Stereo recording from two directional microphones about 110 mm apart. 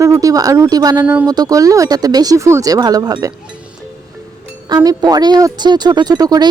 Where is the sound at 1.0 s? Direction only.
15° right (ahead or behind).